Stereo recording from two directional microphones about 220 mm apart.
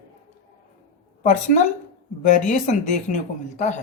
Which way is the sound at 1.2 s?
35° left (ahead or behind).